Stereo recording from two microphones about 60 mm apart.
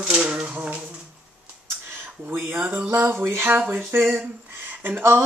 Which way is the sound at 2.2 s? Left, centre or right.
Right.